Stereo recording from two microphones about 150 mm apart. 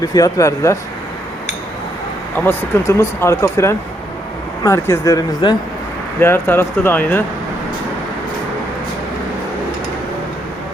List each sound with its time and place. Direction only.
0.0 s speech: 25° left (ahead or behind)
2.4 s speech: 15° left (ahead or behind)
6.1 s speech: 15° left (ahead or behind)